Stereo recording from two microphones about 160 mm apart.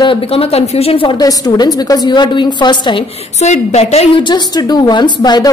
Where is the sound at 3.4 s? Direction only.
45° left (ahead or behind).